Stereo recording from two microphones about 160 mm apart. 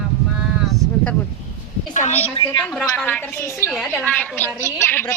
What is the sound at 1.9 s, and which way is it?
Speech, 45° left (ahead or behind).